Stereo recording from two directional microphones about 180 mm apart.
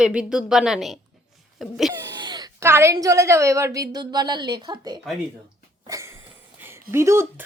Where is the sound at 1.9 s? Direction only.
20° right (ahead or behind).